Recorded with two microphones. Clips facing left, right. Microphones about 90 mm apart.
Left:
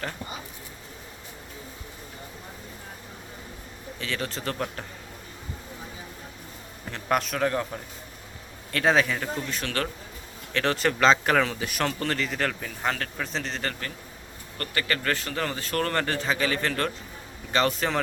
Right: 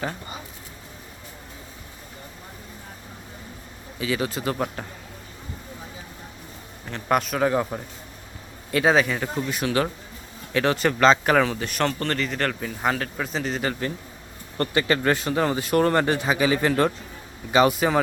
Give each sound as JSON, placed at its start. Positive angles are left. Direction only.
{"t": 3.9, "sound": "speech", "side_deg": -5}
{"t": 6.9, "sound": "speech", "side_deg": 0}
{"t": 14.6, "sound": "speech", "side_deg": -20}